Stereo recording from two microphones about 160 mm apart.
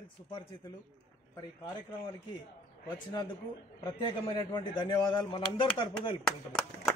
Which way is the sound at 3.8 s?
25° left (ahead or behind).